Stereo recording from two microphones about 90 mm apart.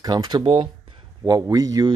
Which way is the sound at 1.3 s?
40° right (ahead or behind).